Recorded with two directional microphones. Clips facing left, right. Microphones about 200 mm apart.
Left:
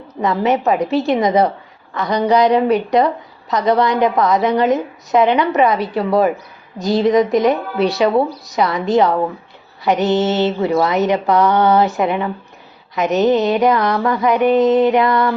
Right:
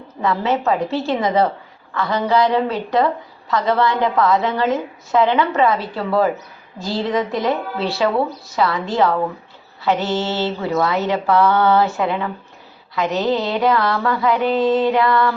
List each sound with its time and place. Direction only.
0.2 s a woman's voice: 15° left (ahead or behind)
13.0 s mantra: 20° left (ahead or behind)